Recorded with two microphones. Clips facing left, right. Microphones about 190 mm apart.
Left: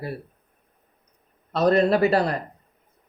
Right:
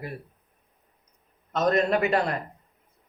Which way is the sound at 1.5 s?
35° left (ahead or behind).